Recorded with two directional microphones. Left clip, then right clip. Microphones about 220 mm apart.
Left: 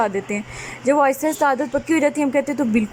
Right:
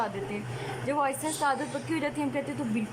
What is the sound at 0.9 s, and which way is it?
A woman's voice, 30° left (ahead or behind).